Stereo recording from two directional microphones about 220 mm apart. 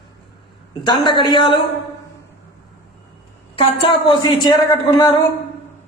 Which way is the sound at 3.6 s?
25° left (ahead or behind).